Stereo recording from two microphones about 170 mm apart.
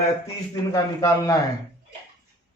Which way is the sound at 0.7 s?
20° left (ahead or behind).